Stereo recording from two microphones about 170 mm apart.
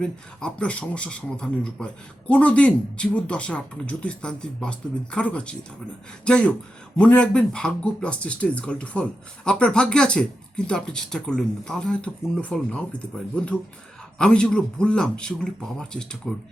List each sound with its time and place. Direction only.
0.0 s speech: 5° left (ahead or behind)